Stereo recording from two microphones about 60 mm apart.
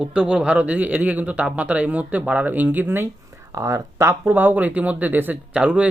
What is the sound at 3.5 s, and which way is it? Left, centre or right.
Speech, right.